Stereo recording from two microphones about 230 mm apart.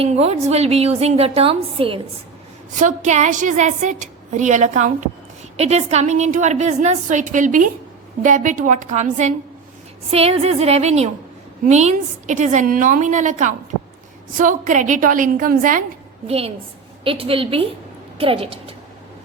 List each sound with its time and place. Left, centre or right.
0.0 s a woman's voice: right
16.2 s a woman's voice: right